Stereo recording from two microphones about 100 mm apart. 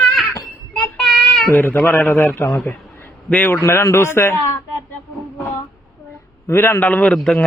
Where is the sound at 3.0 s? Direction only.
15° left (ahead or behind).